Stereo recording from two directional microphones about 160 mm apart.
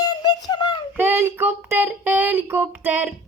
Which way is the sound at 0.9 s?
15° right (ahead or behind).